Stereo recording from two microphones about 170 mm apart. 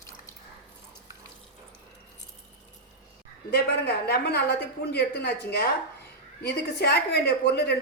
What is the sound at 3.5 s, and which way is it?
A woman's voice, 70° left (ahead or behind).